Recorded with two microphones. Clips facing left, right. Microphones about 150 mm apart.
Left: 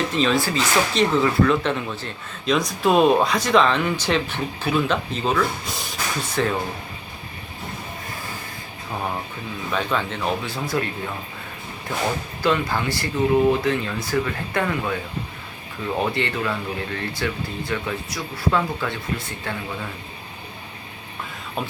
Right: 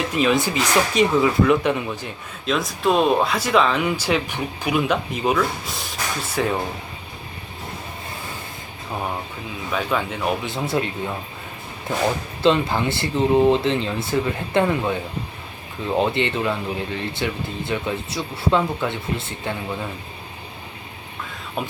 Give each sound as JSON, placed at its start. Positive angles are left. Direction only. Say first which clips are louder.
{"t": 0.1, "sound": "speech", "louder": "right 1 dB", "side_deg": -10}
{"t": 2.5, "sound": "speech", "louder": "left 1 dB", "side_deg": 0}
{"t": 9.7, "sound": "speech", "louder": "right 1 dB", "side_deg": -10}
{"t": 10.4, "sound": "speech", "louder": "right 2 dB", "side_deg": -20}
{"t": 12.4, "sound": "speech", "louder": "right 4 dB", "side_deg": -25}
{"t": 16.0, "sound": "speech", "louder": "right 4 dB", "side_deg": -20}